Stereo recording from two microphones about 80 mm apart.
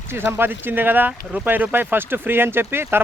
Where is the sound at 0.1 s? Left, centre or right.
Right.